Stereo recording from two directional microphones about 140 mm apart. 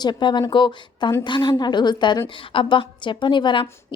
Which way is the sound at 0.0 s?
30° left (ahead or behind).